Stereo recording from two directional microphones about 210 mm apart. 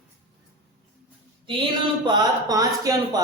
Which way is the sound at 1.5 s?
20° right (ahead or behind).